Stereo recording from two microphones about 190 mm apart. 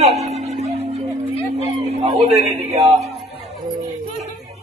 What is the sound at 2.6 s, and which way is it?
Speech, 35° right (ahead or behind).